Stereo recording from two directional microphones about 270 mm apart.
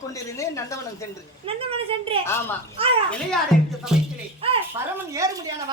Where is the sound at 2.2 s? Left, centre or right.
Centre.